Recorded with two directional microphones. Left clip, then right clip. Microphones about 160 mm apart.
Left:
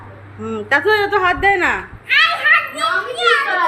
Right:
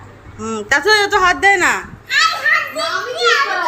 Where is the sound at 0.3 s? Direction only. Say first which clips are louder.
Right 1 dB; centre (ahead or behind).